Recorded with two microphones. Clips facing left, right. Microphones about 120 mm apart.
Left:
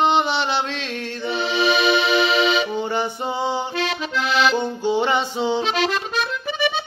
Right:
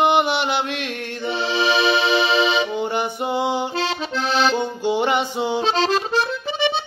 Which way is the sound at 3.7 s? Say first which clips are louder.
Even; 30° right (ahead or behind).